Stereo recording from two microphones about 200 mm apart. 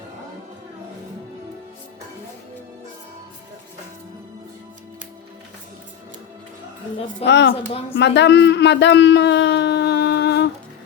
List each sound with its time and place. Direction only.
7.3 s speech: 60° left (ahead or behind)